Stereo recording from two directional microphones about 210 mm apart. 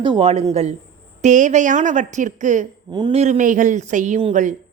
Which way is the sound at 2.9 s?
20° right (ahead or behind).